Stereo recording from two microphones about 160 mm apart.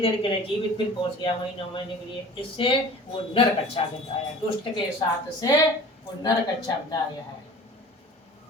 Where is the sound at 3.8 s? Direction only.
35° left (ahead or behind).